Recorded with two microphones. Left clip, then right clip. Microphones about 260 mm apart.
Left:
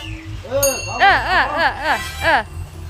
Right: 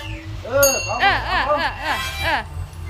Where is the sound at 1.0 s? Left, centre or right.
Centre.